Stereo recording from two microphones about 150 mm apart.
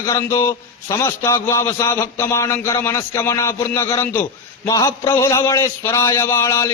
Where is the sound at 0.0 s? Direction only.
20° left (ahead or behind).